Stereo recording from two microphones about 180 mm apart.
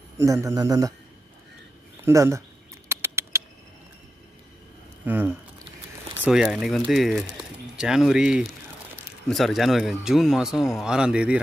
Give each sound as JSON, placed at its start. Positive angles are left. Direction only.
{"t": 0.2, "sound": "speech", "side_deg": -15}
{"t": 2.0, "sound": "speech", "side_deg": -15}
{"t": 2.9, "sound": "rodents", "side_deg": -15}
{"t": 5.0, "sound": "speech", "side_deg": -10}